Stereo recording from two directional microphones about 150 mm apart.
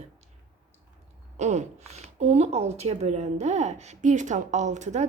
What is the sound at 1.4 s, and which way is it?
Speech, 50° right (ahead or behind).